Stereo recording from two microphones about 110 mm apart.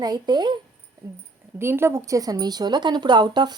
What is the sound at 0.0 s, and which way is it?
Speech, 45° right (ahead or behind).